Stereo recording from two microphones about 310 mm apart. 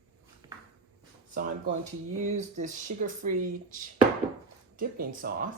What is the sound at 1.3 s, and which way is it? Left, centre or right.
Speech, right.